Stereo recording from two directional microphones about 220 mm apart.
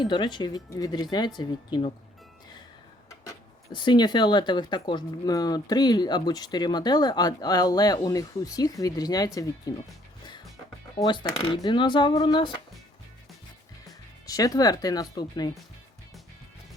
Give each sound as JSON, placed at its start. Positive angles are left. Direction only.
{"t": 0.0, "sound": "speech", "side_deg": 20}
{"t": 3.1, "sound": "speech", "side_deg": 20}
{"t": 10.9, "sound": "speech", "side_deg": 20}
{"t": 14.3, "sound": "speech", "side_deg": 15}